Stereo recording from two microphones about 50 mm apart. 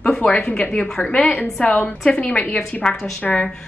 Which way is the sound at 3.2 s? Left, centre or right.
Left.